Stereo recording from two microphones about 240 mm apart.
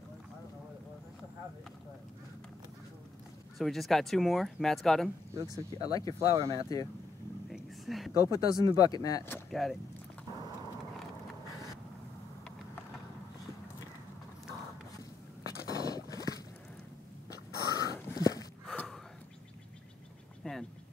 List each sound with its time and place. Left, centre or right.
3.5 s speech: centre
5.3 s speech: centre
5.9 s speech: centre
6.3 s speech: centre
7.4 s whispering: centre
8.1 s speech: centre
15.8 s horse: centre
17.6 s dog: centre
17.9 s a sound: centre
18.7 s gasp: centre
20.4 s a sound: centre